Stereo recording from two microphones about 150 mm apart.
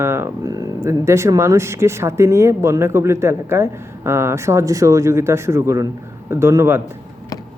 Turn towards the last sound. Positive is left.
turn(degrees=-15)  # may be behind; listen again after turning